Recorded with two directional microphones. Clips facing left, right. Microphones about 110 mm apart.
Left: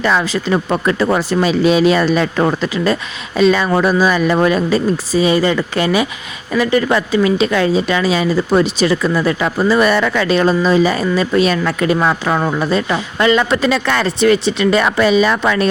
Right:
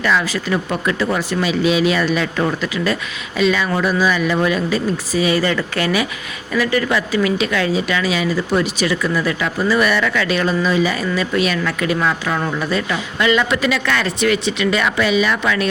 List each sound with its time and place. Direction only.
0.0 s a woman's voice: 30° left (ahead or behind)